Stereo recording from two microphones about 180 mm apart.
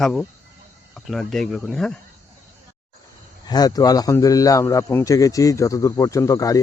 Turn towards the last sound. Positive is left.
turn(degrees=20)  # may be behind; listen again after turning